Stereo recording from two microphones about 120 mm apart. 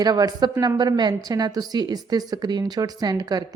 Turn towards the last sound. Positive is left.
turn(degrees=-35)  # may be behind; listen again after turning